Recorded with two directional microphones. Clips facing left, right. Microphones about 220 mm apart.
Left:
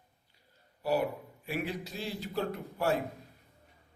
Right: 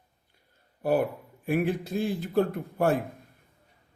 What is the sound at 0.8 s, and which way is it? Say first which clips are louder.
A man's voice: right 5 dB; 50° right (ahead or behind).